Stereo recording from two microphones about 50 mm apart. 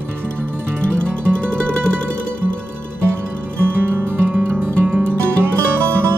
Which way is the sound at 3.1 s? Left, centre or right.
Right.